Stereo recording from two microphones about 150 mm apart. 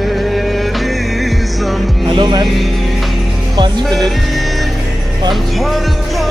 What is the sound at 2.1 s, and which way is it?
Speech, 30° right (ahead or behind).